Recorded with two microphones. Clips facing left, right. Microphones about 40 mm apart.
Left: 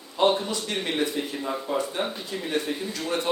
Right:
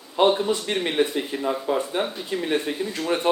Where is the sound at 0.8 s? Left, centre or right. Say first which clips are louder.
Right 4 dB; right.